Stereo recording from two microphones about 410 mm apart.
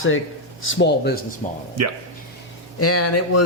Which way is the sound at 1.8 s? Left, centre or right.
Right.